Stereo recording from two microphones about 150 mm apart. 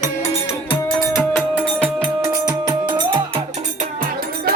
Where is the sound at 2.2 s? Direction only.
25° right (ahead or behind).